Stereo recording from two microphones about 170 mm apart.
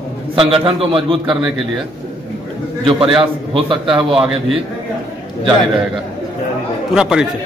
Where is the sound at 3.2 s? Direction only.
30° right (ahead or behind).